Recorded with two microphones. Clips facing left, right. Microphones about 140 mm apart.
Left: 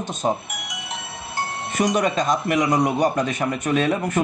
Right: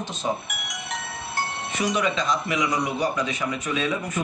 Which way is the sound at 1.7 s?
45° left (ahead or behind).